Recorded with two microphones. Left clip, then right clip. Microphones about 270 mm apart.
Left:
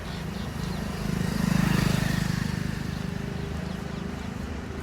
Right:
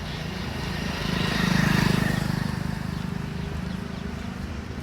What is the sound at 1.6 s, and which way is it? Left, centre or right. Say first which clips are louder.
Vehicle: right 4 dB; right.